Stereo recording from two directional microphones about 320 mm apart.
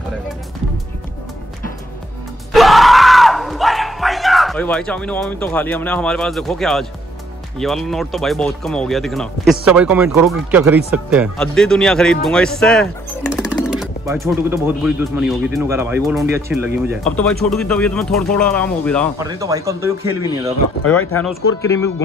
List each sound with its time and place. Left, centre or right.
2.5 s screaming: centre
7.5 s speech: centre
16.7 s speech: right
17.0 s speech: centre
19.1 s speech: centre
20.8 s speech: centre